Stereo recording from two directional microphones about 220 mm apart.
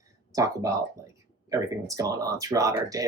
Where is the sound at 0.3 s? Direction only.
15° right (ahead or behind).